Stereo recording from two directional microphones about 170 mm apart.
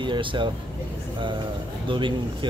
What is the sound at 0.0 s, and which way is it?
Speech, 30° right (ahead or behind).